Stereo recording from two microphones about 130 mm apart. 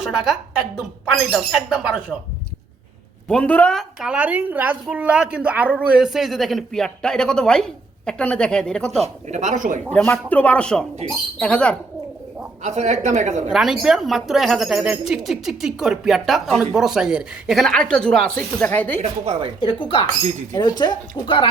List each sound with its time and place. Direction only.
0.0 s a woman's voice: 5° right (ahead or behind)
3.2 s speech: 10° left (ahead or behind)
4.0 s a woman's voice: 10° right (ahead or behind); by 8.9 s 5° left (ahead or behind)
9.3 s speech: 70° right (ahead or behind)
9.9 s speech: 10° left (ahead or behind)
12.6 s a woman's voice: 60° right (ahead or behind)
13.5 s speech: centre (ahead or behind); by 19.0 s 15° left (ahead or behind)
19.2 s speech: 50° right (ahead or behind)
19.5 s a woman's voice: 40° left (ahead or behind)